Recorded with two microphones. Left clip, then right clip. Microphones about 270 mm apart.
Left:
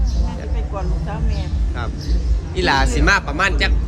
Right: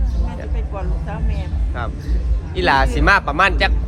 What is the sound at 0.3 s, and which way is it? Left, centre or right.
Speech, centre.